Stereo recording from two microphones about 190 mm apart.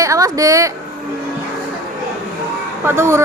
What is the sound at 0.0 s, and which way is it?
Speech, 15° right (ahead or behind).